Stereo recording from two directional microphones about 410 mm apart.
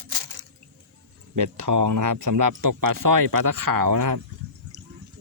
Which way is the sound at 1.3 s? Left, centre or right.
Right.